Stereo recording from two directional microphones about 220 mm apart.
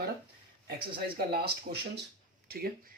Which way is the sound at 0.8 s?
45° right (ahead or behind).